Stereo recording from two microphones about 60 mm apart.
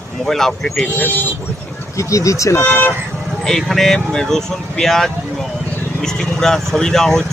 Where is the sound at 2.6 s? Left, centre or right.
Left.